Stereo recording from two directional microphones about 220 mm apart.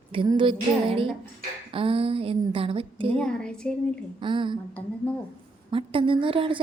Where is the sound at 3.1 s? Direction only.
5° left (ahead or behind).